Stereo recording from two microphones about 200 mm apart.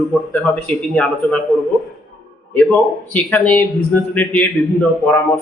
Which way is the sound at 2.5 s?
5° left (ahead or behind).